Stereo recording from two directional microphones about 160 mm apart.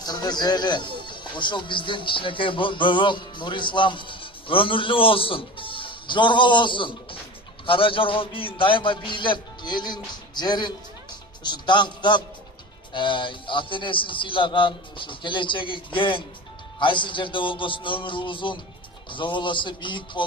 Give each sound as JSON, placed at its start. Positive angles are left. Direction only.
{"t": 0.0, "sound": "a man's voice", "side_deg": 25}